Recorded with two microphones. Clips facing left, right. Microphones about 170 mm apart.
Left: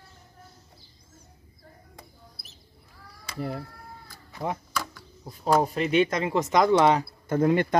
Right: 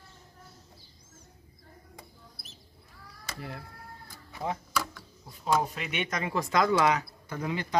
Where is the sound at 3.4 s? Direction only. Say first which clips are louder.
Left 10 dB; 40° left (ahead or behind).